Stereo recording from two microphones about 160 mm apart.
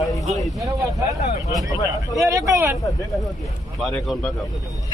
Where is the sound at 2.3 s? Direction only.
20° right (ahead or behind).